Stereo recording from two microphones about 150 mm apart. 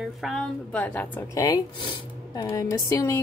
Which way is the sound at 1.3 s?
25° left (ahead or behind).